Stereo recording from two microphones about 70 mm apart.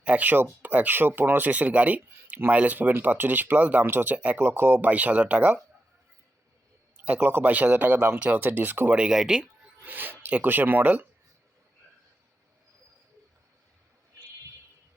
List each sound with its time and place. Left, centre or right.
0.0 s speech: centre
4.9 s speech: right
6.9 s speech: right
9.0 s speech: centre
9.8 s speech: right